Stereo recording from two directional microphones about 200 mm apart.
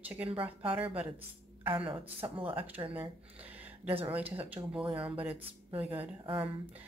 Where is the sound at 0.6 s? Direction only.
5° right (ahead or behind).